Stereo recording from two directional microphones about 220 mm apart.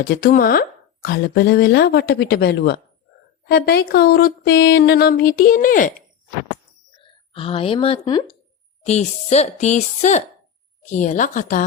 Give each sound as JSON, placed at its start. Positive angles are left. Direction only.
{"t": 0.0, "sound": "speech", "side_deg": 40}
{"t": 1.0, "sound": "a sound", "side_deg": 45}
{"t": 7.0, "sound": "speech", "side_deg": 25}